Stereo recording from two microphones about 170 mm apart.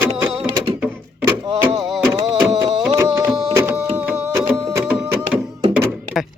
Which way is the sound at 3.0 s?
20° right (ahead or behind).